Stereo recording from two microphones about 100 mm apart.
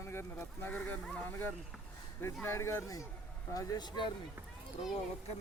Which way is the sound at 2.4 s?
25° left (ahead or behind).